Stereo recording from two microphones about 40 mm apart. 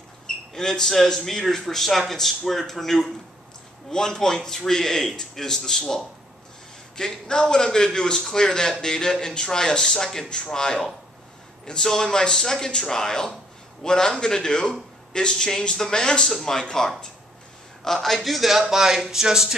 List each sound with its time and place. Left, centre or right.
0.6 s a man's voice: centre